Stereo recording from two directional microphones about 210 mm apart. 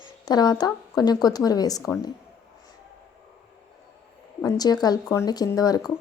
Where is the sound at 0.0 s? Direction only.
20° left (ahead or behind).